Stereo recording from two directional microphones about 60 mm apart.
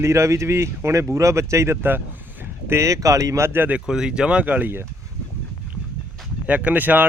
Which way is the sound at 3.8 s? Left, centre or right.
Centre.